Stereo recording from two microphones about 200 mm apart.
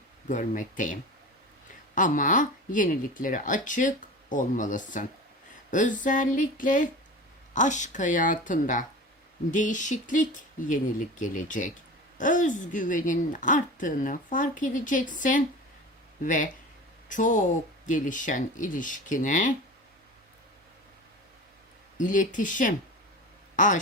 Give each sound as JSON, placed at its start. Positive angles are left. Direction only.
{"t": 0.3, "sound": "a woman's voice", "side_deg": 40}
{"t": 2.0, "sound": "a woman's voice", "side_deg": 40}
{"t": 21.9, "sound": "a woman's voice", "side_deg": 40}